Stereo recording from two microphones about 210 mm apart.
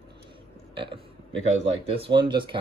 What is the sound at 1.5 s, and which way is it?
Speech, 30° right (ahead or behind).